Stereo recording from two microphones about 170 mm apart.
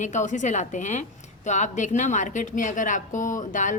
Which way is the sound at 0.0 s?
45° left (ahead or behind).